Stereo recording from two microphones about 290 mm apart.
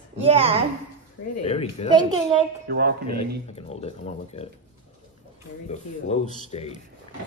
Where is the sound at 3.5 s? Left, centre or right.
Left.